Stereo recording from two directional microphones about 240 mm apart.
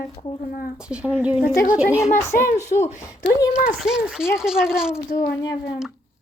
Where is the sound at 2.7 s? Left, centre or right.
Left.